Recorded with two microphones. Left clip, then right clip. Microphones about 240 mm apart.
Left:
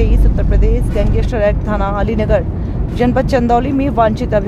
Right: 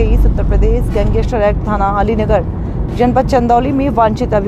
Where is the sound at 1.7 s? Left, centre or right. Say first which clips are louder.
Right 4 dB; centre.